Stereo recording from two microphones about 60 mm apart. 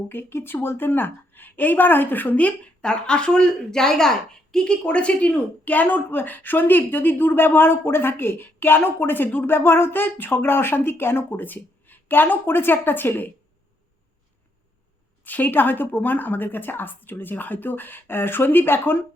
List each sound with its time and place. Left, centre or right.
0.1 s a woman's voice: left
2.8 s a woman's voice: centre; by 13.3 s left
15.2 s a woman's voice: left